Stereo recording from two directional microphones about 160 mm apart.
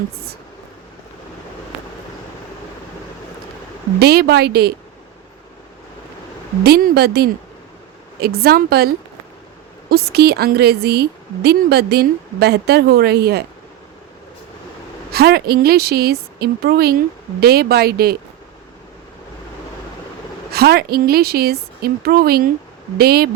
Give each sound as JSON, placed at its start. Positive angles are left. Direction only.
{"t": 4.0, "sound": "a woman's voice", "side_deg": -85}
{"t": 6.7, "sound": "a woman's voice", "side_deg": -80}
{"t": 9.9, "sound": "a woman's voice", "side_deg": -80}
{"t": 15.1, "sound": "a woman's voice", "side_deg": -80}
{"t": 20.5, "sound": "a woman's voice", "side_deg": -75}